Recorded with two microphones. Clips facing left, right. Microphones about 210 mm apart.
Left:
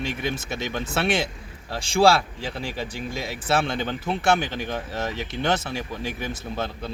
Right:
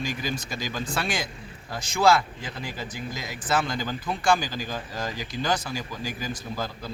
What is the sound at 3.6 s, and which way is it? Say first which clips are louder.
Speech: left 3 dB; 65° left (ahead or behind).